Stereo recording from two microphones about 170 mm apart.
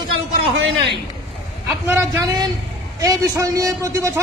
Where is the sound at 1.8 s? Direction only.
15° right (ahead or behind).